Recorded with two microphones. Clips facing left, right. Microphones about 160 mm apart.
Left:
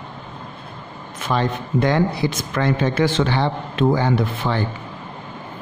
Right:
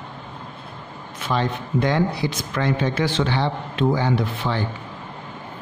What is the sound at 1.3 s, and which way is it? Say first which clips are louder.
Speech: left 2 dB; 50° left (ahead or behind).